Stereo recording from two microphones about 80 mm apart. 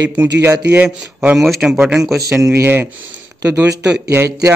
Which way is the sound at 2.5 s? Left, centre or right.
Right.